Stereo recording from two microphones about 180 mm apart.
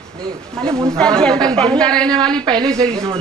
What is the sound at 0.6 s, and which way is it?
Cough, 5° left (ahead or behind).